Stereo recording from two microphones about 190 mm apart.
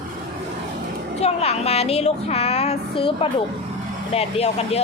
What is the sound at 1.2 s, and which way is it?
Speech, 35° left (ahead or behind).